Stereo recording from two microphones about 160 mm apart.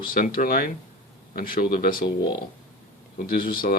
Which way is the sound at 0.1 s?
65° left (ahead or behind).